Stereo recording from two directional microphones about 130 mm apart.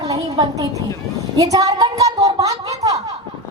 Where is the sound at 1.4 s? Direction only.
25° right (ahead or behind).